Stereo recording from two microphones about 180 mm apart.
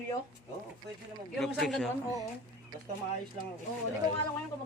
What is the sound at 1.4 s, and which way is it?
Speech, centre (ahead or behind).